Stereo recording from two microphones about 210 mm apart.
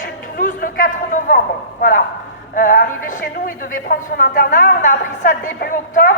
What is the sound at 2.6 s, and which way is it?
A woman's voice, 40° left (ahead or behind).